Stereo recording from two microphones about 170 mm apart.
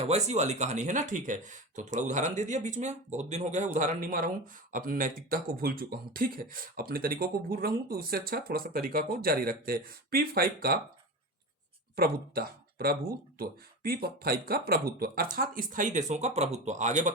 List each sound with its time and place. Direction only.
0.0 s speech: 40° right (ahead or behind); by 10.8 s 60° right (ahead or behind)
11.9 s speech: 60° right (ahead or behind); by 17.1 s 45° right (ahead or behind)